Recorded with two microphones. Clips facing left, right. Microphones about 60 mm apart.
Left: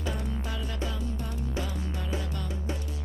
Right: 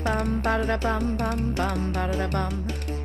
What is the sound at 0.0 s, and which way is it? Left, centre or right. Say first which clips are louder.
Music: right 10 dB; right.